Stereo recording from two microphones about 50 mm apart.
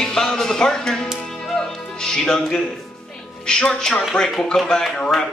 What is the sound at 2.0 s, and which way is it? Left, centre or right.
A woman's voice, centre.